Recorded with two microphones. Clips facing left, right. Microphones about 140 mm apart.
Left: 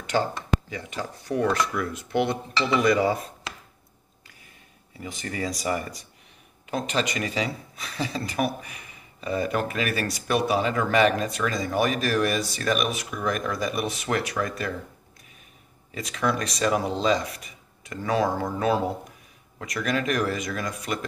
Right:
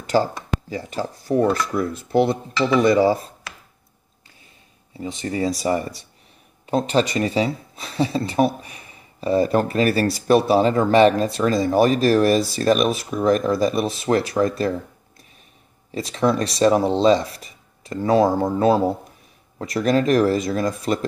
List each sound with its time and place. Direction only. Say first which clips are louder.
0.0 s speech: right 5 dB; 35° right (ahead or behind)
4.9 s speech: right 7 dB; 25° right (ahead or behind)
15.9 s speech: right 6 dB; 30° right (ahead or behind)